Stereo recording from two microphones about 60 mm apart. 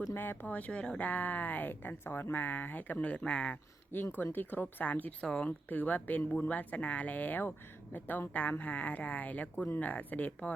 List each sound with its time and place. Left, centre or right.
0.1 s speech: left
0.4 s speech: left
3.9 s speech: left
5.2 s speech: centre
5.6 s speech: left